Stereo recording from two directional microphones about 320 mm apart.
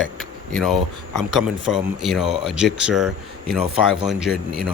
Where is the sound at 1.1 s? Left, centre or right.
Centre.